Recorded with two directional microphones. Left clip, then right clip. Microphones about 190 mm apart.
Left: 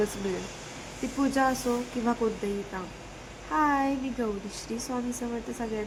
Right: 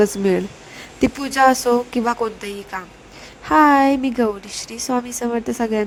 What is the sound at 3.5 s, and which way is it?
Speech, 55° right (ahead or behind).